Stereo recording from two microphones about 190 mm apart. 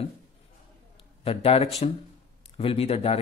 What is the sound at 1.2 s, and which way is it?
Speech, 30° left (ahead or behind).